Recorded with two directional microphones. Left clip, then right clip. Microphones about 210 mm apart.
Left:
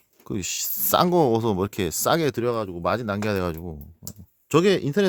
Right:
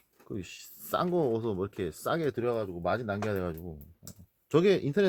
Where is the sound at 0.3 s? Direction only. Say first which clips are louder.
Left 12 dB; 50° left (ahead or behind).